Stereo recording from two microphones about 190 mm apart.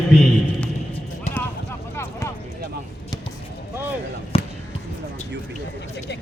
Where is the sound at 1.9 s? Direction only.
15° left (ahead or behind).